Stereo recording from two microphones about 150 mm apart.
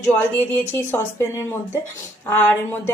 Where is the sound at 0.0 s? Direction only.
15° left (ahead or behind).